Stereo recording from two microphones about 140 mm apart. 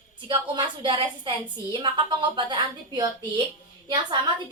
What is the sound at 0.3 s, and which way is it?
A woman's voice, 35° right (ahead or behind).